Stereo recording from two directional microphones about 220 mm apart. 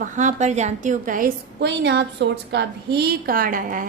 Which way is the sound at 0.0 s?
35° right (ahead or behind).